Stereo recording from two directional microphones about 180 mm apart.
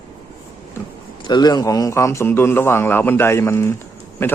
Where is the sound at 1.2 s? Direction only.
25° left (ahead or behind).